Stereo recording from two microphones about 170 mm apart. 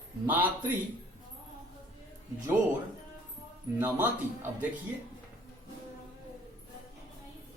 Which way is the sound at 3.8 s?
10° right (ahead or behind).